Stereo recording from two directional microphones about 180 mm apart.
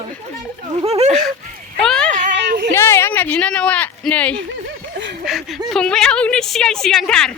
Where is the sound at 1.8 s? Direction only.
5° left (ahead or behind).